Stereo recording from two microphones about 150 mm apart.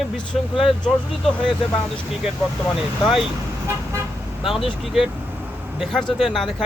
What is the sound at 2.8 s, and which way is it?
Speech, 5° right (ahead or behind).